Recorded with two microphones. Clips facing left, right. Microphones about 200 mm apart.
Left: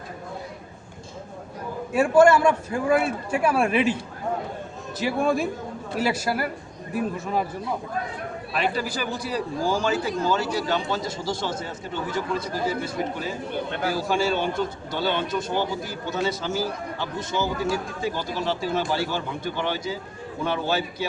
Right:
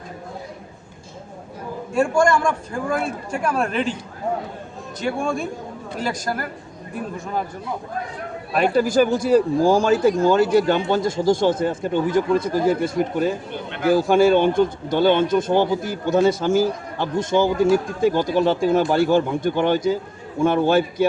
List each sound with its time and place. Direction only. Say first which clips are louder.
1.9 s a man's voice: left 2 dB; 5° left (ahead or behind)
4.9 s a man's voice: left 1 dB; 5° left (ahead or behind)
8.5 s a man's voice: right 10 dB; 45° right (ahead or behind)